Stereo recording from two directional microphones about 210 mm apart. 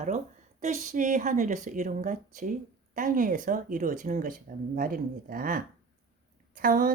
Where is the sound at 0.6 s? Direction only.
35° right (ahead or behind).